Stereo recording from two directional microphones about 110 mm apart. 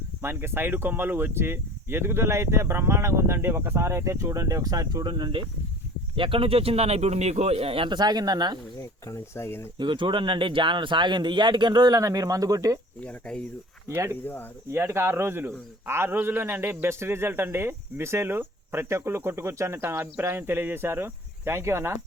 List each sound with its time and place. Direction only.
0.2 s a man's voice: 20° right (ahead or behind); by 7.9 s 60° right (ahead or behind)
7.9 s speech: 40° right (ahead or behind)
8.8 s speech: 30° left (ahead or behind)
9.7 s speech: 45° right (ahead or behind)
13.1 s speech: 5° left (ahead or behind)
13.8 s speech: 25° right (ahead or behind)